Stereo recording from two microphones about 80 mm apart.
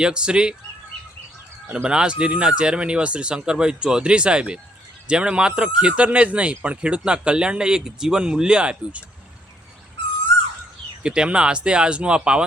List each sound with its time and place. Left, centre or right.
0.0 s speech: centre
1.7 s speech: centre
11.0 s speech: centre